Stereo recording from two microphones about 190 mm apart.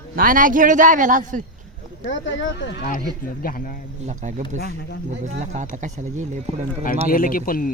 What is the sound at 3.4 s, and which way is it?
Speech, 50° left (ahead or behind).